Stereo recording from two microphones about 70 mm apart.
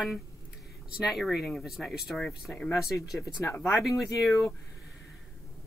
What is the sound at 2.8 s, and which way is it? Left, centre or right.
Speech, left.